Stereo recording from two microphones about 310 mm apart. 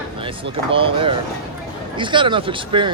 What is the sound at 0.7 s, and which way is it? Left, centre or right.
Speech, centre.